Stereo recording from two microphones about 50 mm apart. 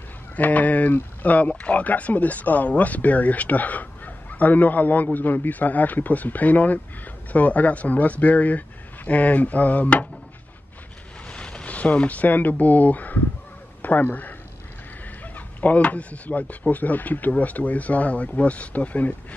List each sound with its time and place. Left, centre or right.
0.4 s speech: left
11.2 s speech: centre; by 14.3 s left
15.3 s speech: left